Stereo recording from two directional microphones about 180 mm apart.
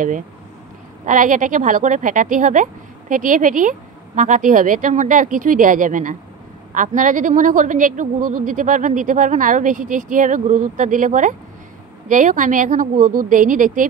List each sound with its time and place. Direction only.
1.0 s a woman's voice: 45° right (ahead or behind)